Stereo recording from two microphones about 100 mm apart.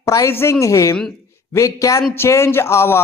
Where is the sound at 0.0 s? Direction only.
35° left (ahead or behind).